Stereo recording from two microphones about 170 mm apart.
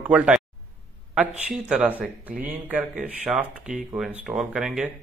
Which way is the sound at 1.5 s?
5° right (ahead or behind).